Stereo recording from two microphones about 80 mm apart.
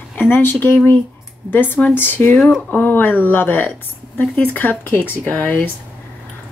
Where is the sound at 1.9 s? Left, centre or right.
Left.